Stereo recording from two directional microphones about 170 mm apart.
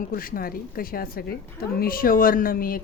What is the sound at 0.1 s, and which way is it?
A woman's voice, 55° left (ahead or behind).